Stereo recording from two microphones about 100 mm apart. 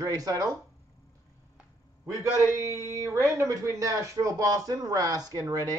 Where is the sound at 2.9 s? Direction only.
30° right (ahead or behind).